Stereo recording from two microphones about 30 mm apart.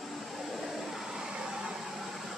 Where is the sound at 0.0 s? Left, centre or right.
Centre.